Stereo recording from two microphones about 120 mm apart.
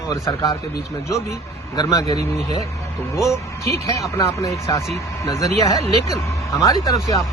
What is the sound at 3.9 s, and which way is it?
A man's voice, 25° left (ahead or behind).